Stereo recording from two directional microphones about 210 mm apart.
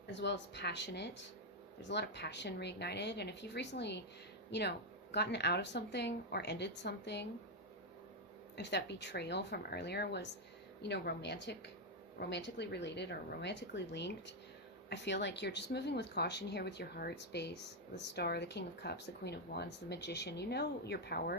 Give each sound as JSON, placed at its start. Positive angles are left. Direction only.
{"t": 0.1, "sound": "speech", "side_deg": 55}
{"t": 5.1, "sound": "speech", "side_deg": 55}
{"t": 8.5, "sound": "speech", "side_deg": 55}